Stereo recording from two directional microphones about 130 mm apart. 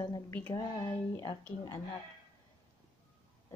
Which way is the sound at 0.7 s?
30° left (ahead or behind).